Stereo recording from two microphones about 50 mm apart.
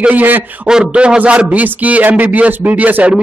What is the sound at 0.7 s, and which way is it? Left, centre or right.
Speech, centre.